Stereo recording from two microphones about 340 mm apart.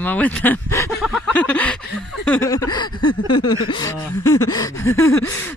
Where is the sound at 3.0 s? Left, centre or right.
Left.